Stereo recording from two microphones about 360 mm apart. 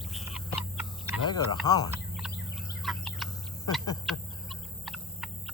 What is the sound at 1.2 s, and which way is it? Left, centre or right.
Speech, centre.